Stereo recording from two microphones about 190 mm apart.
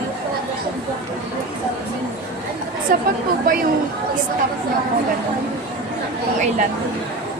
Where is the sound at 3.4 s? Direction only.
45° right (ahead or behind).